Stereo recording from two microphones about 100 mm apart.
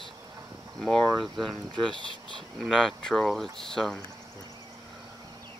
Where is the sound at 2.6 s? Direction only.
5° left (ahead or behind).